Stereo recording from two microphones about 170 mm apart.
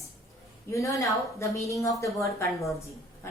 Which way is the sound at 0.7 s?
20° left (ahead or behind).